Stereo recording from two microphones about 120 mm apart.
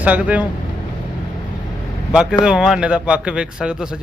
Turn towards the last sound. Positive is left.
turn(degrees=-5)  # may be behind; listen again after turning